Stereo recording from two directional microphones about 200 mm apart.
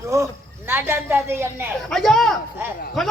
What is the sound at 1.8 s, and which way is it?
Speech, centre (ahead or behind).